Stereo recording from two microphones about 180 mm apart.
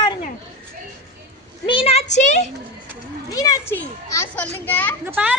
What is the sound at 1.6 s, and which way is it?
Speech, 30° left (ahead or behind).